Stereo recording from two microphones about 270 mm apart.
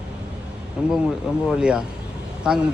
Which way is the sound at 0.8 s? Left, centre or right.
Centre.